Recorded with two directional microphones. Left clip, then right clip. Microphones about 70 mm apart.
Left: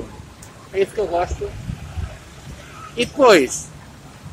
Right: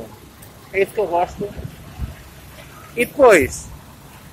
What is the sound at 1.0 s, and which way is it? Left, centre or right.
Speech, centre.